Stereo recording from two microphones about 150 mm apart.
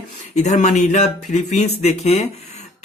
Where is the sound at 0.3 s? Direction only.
50° left (ahead or behind).